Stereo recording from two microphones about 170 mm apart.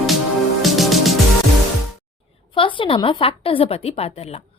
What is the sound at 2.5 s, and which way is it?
A woman's voice, 30° left (ahead or behind).